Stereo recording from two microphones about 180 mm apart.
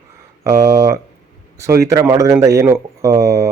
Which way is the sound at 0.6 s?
15° right (ahead or behind).